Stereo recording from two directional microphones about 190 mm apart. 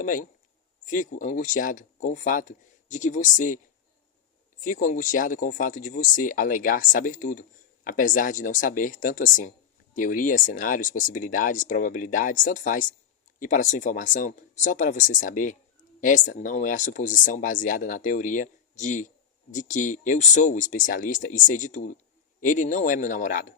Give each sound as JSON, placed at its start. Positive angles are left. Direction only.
{"t": 0.0, "sound": "speech", "side_deg": 45}
{"t": 4.6, "sound": "speech", "side_deg": 45}